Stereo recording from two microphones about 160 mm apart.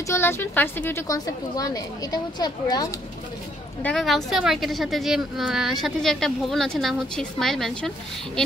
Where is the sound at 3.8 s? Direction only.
5° left (ahead or behind).